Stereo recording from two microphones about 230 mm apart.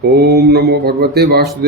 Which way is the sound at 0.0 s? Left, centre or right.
Right.